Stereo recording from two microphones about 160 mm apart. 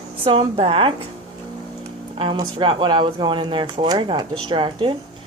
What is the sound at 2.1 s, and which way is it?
Speech, 30° right (ahead or behind).